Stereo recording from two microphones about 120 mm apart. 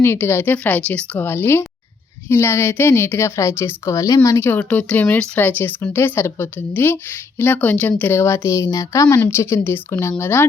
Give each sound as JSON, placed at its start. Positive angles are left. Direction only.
{"t": 0.0, "sound": "a woman's voice", "side_deg": 20}
{"t": 4.4, "sound": "speech", "side_deg": 15}